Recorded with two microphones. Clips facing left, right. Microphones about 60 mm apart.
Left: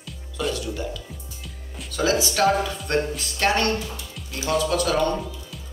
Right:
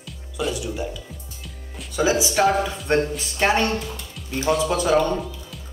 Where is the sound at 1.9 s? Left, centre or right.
Centre.